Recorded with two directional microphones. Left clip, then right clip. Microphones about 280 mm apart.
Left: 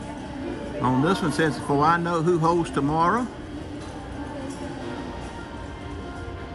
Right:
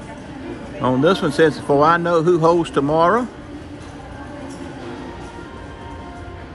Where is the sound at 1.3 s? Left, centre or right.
Centre.